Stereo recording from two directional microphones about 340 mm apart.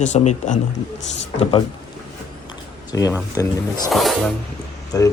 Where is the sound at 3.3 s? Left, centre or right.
Centre.